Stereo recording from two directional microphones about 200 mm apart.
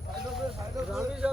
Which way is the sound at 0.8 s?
5° right (ahead or behind).